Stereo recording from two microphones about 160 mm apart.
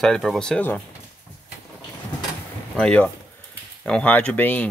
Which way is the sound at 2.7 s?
5° left (ahead or behind).